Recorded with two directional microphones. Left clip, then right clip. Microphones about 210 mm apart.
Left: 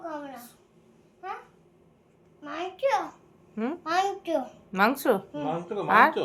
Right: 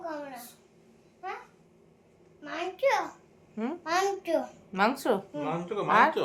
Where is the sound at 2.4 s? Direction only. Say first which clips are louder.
Even; 5° right (ahead or behind).